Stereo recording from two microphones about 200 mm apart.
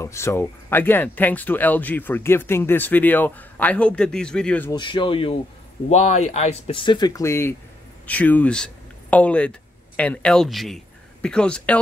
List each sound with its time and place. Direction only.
0.0 s speech: 15° left (ahead or behind)
4.7 s speech: 25° left (ahead or behind); by 11.8 s 5° left (ahead or behind)